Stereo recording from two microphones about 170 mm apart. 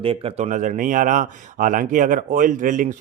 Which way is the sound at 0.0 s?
35° right (ahead or behind).